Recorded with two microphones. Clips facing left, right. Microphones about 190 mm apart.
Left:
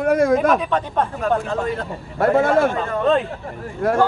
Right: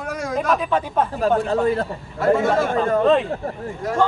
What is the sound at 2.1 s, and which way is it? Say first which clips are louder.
Speech: left 2 dB; 55° left (ahead or behind).